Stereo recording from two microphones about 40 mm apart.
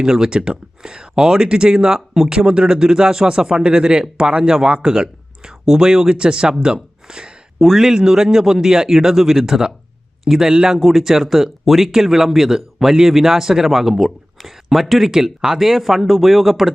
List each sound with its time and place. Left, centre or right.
0.0 s speech: centre
7.6 s speech: centre
7.9 s speech: centre
10.8 s speech: centre